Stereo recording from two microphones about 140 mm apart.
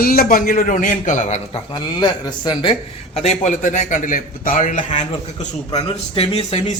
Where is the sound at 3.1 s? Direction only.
55° left (ahead or behind).